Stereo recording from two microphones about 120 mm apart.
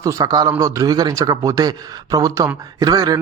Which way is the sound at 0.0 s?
25° right (ahead or behind).